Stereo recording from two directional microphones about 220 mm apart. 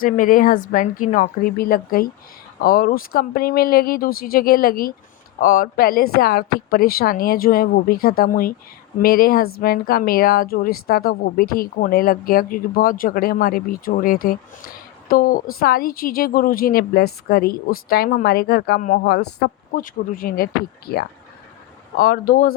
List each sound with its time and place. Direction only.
0.0 s a woman's voice: 40° left (ahead or behind)